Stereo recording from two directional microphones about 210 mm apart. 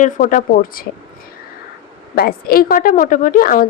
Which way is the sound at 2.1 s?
45° left (ahead or behind).